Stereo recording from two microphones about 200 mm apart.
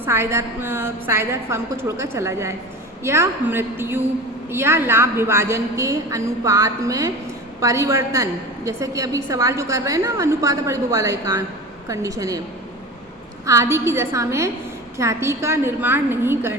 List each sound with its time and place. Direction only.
0.0 s a woman's voice: 15° right (ahead or behind)
13.4 s a woman's voice: 15° right (ahead or behind)